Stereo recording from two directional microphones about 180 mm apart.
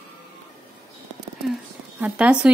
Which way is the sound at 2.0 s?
5° right (ahead or behind).